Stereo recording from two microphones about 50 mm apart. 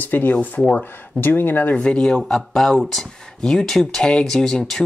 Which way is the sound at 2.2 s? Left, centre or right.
Centre.